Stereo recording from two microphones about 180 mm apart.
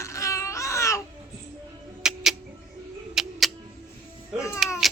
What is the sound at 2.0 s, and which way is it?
Music, 5° right (ahead or behind).